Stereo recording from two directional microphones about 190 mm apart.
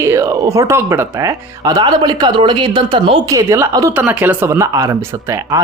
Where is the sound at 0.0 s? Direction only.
15° right (ahead or behind).